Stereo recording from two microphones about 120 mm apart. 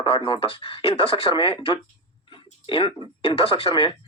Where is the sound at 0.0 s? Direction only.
45° left (ahead or behind).